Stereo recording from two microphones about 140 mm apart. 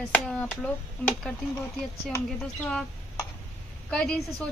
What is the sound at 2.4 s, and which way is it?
Speech, 5° left (ahead or behind).